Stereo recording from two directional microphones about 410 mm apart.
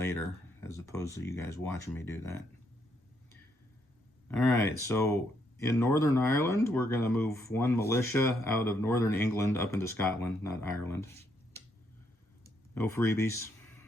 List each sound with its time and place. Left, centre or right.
0.0 s speech: centre
4.4 s speech: left
4.9 s speech: centre
12.7 s speech: centre